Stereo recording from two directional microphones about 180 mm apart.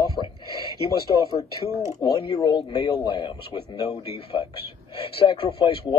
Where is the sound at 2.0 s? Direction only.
20° left (ahead or behind).